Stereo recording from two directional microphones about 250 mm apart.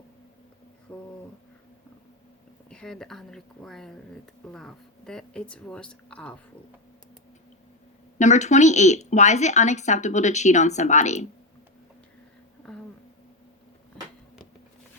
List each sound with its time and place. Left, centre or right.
0.9 s a sound: centre
2.6 s speech: centre
8.2 s speech: left